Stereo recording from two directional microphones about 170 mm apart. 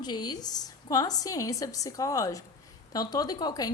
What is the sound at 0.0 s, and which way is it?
A woman's voice, 25° left (ahead or behind).